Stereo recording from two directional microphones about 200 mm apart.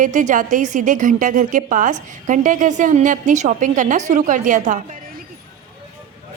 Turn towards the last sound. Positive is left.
turn(degrees=-40)  # may be behind; listen again after turning